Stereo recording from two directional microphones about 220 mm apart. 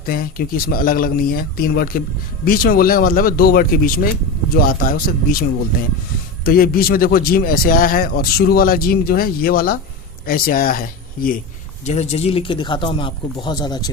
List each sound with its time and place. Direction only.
0.0 s speech: 40° left (ahead or behind); by 13.9 s 20° left (ahead or behind)